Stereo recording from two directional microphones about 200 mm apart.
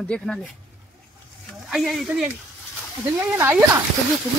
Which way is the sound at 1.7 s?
Centre (ahead or behind).